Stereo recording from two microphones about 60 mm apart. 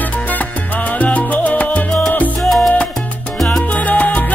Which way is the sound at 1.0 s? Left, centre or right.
Left.